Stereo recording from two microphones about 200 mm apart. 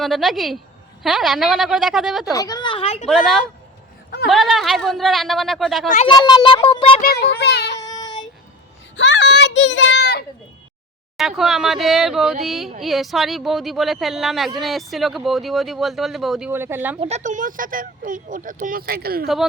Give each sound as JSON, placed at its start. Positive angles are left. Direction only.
{"t": 0.0, "sound": "speech", "side_deg": 0}
{"t": 2.3, "sound": "a sound", "side_deg": 15}
{"t": 3.1, "sound": "speech", "side_deg": 0}
{"t": 6.1, "sound": "child singing", "side_deg": 20}
{"t": 7.0, "sound": "speech", "side_deg": 50}
{"t": 7.8, "sound": "child singing", "side_deg": 20}
{"t": 9.0, "sound": "children playing", "side_deg": 60}
{"t": 11.2, "sound": "speech", "side_deg": 0}
{"t": 16.5, "sound": "speech", "side_deg": -10}
{"t": 17.0, "sound": "speech", "side_deg": -35}